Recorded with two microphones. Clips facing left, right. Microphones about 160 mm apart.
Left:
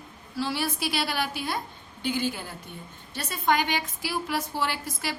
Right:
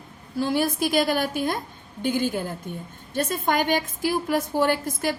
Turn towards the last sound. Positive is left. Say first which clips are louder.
# right 8 dB
turn(degrees=-45)  # may be behind; listen again after turning